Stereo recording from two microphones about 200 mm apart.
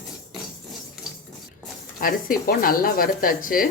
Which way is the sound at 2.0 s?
45° left (ahead or behind).